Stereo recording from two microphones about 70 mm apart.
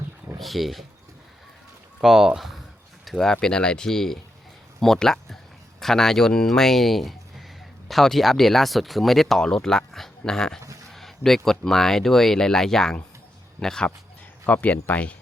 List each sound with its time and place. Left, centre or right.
0.3 s speech: centre
2.0 s speech: centre
3.0 s a sound: centre
3.4 s speech: centre
14.4 s speech: left